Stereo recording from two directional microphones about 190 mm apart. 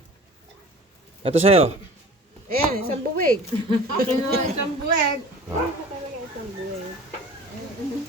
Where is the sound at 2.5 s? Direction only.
50° right (ahead or behind).